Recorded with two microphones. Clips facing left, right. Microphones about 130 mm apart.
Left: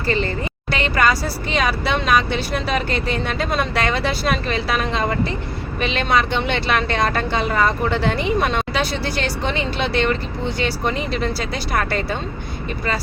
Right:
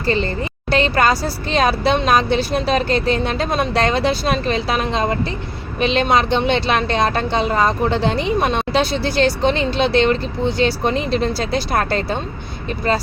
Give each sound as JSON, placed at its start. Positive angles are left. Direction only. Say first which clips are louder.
{"t": 0.7, "sound": "speech", "louder": "right 3 dB", "side_deg": -30}